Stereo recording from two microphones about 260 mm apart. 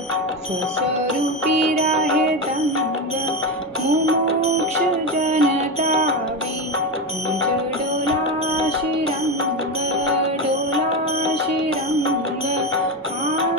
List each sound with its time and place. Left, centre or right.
5.2 s music: right